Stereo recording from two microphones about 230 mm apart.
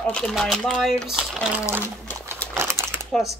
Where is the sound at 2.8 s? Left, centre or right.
Centre.